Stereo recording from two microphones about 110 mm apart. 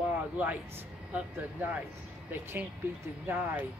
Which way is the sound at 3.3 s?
15° right (ahead or behind).